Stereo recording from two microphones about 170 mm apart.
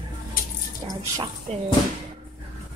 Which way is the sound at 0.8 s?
30° right (ahead or behind).